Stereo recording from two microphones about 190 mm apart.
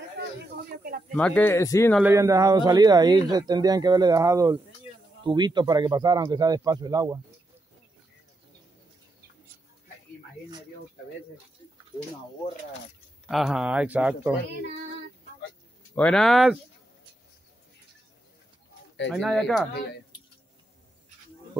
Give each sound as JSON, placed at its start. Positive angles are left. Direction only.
{"t": 1.1, "sound": "speech", "side_deg": 5}
{"t": 2.0, "sound": "speech", "side_deg": -15}
{"t": 13.3, "sound": "speech", "side_deg": 0}
{"t": 16.0, "sound": "speech", "side_deg": 5}
{"t": 19.0, "sound": "speech", "side_deg": 0}